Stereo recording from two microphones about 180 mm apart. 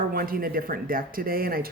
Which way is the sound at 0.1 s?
55° right (ahead or behind).